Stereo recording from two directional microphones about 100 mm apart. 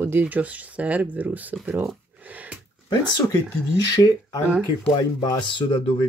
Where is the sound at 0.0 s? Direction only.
20° right (ahead or behind).